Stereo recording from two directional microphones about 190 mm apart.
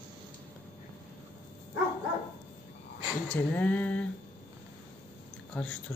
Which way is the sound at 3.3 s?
10° left (ahead or behind).